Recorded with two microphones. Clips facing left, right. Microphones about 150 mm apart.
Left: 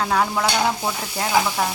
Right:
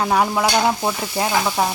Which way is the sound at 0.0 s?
15° right (ahead or behind).